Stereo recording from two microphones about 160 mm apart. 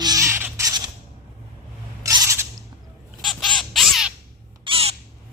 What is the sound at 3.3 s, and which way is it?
Crow, centre (ahead or behind).